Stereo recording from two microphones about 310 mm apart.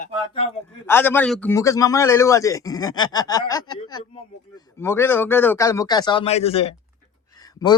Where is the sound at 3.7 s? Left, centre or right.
Left.